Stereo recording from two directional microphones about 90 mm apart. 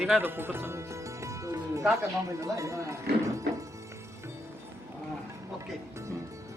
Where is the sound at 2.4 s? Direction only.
35° right (ahead or behind).